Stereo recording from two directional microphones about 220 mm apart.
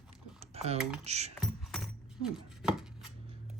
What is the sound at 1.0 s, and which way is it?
Speech, 30° right (ahead or behind).